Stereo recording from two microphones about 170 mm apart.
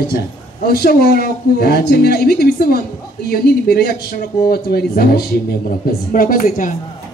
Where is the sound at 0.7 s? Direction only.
65° left (ahead or behind).